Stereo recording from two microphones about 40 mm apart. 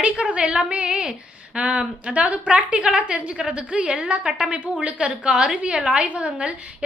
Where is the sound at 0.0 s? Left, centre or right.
Right.